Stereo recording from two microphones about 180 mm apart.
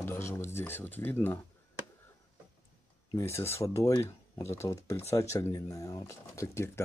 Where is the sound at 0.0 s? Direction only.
15° left (ahead or behind).